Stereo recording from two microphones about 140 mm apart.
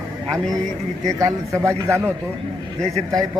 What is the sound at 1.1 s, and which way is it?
Speech, 25° right (ahead or behind).